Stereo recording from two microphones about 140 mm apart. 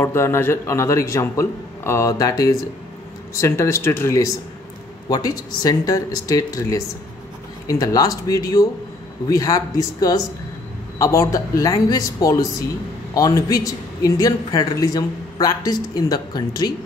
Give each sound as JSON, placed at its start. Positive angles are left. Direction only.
{"t": 0.0, "sound": "speech", "side_deg": 20}